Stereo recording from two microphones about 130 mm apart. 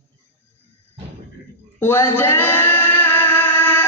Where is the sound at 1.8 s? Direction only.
15° left (ahead or behind).